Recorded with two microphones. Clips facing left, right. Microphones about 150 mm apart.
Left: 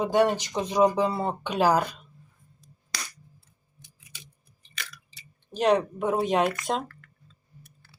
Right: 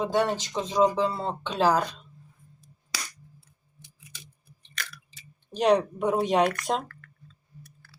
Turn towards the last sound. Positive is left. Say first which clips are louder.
# right 1 dB
turn(degrees=0)  # may be behind; listen again after turning